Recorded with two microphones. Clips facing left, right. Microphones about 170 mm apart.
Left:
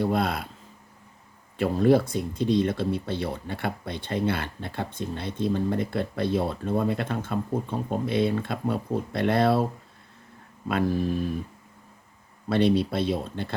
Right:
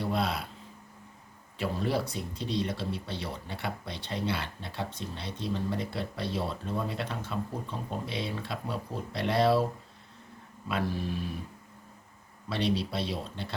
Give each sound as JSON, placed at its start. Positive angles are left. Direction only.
{"t": 0.0, "sound": "speech", "side_deg": 50}
{"t": 1.5, "sound": "speech", "side_deg": 50}
{"t": 10.7, "sound": "speech", "side_deg": 50}
{"t": 12.5, "sound": "speech", "side_deg": 55}